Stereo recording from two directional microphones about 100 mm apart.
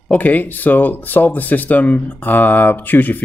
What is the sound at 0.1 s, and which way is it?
Speech, 15° left (ahead or behind).